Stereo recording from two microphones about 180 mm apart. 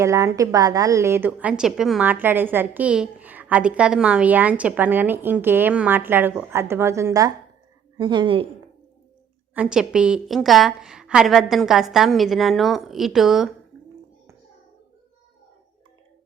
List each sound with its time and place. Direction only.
0.0 s a woman's voice: 15° right (ahead or behind)
9.6 s a woman's voice: 5° right (ahead or behind)